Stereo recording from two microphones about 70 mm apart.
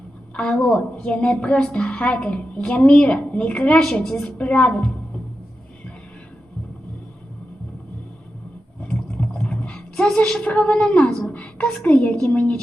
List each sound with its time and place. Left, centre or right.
0.3 s a woman's voice: centre
4.4 s a woman's voice: centre
8.8 s a sound: centre
9.4 s boat: centre
10.4 s a woman's voice: centre